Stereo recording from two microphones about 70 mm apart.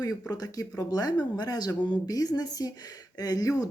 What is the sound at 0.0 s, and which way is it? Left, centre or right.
Speech, left.